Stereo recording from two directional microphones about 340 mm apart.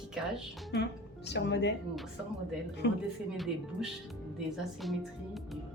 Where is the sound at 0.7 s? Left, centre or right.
Left.